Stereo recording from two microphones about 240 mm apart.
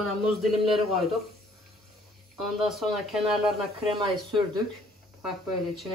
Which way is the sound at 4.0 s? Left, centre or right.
Centre.